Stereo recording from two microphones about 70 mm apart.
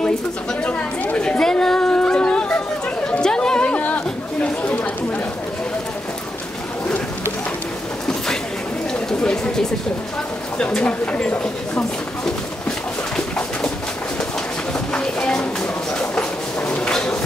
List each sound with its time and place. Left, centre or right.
0.7 s chatter: centre
10.6 s speech: centre
14.7 s bird: centre
15.9 s a sound: centre